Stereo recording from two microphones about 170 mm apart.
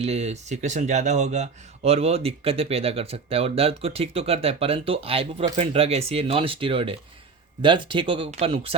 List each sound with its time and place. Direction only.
0.0 s speech: 40° right (ahead or behind)